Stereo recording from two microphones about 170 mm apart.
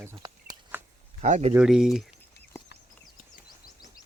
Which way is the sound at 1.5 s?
5° right (ahead or behind).